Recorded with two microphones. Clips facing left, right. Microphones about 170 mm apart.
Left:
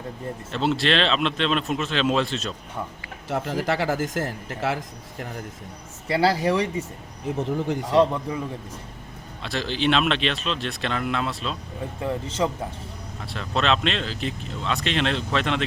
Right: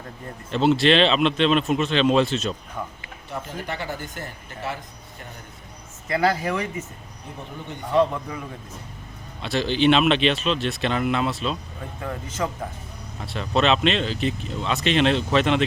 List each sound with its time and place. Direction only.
0.5 s speech: centre (ahead or behind)
3.2 s speech: 90° left
6.1 s speech: 30° left (ahead or behind)
7.3 s speech: 90° left
9.4 s speech: centre (ahead or behind)
12.0 s speech: 25° left (ahead or behind)
13.2 s speech: centre (ahead or behind)